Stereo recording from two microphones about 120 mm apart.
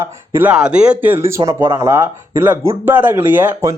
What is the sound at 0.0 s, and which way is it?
Speech, 20° right (ahead or behind).